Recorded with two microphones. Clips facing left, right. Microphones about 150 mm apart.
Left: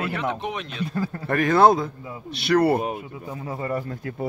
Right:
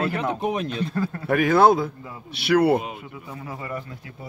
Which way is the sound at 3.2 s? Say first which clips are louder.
Left 5 dB; 25° left (ahead or behind).